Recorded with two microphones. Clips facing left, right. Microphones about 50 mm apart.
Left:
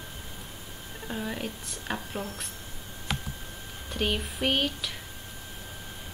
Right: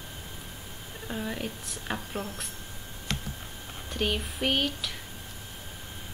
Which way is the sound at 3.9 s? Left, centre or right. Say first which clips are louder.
Even; centre.